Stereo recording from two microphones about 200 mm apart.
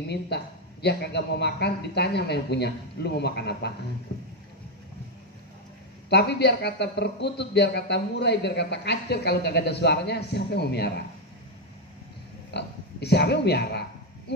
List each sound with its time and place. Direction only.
0.8 s speech: 55° left (ahead or behind)
6.0 s speech: 55° left (ahead or behind)
12.4 s speech: 55° left (ahead or behind)